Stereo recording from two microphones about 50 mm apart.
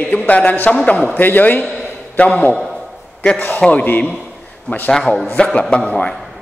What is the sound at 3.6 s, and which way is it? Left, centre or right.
Speech, centre.